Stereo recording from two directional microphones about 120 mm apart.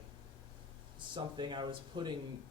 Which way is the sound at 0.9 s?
40° right (ahead or behind).